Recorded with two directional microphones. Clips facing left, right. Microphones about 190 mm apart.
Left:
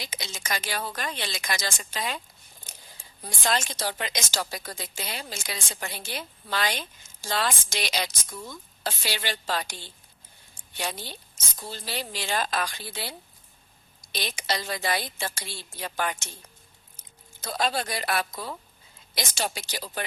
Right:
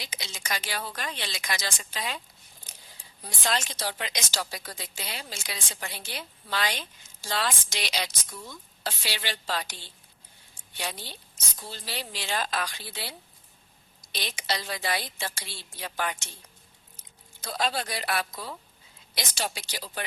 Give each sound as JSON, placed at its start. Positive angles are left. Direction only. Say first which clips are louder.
{"t": 0.0, "sound": "a woman's voice", "louder": "left 3 dB", "side_deg": 45}